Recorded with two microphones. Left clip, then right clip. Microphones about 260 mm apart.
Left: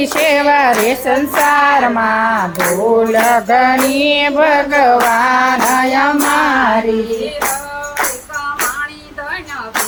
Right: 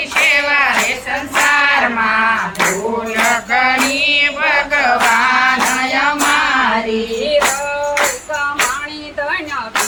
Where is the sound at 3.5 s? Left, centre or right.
Left.